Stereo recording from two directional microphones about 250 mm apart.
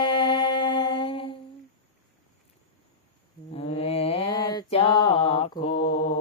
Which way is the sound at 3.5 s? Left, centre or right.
Left.